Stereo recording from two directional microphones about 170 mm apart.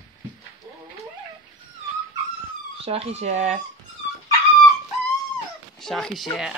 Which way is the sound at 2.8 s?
35° right (ahead or behind).